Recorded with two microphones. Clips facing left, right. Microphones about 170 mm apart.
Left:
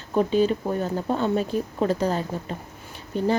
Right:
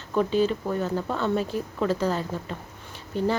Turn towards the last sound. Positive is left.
turn(degrees=15)  # may be behind; listen again after turning